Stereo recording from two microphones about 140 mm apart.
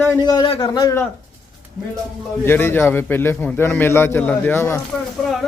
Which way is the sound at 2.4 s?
15° left (ahead or behind).